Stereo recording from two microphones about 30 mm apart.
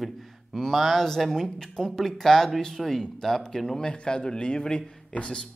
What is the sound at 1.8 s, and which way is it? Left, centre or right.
Speech, centre.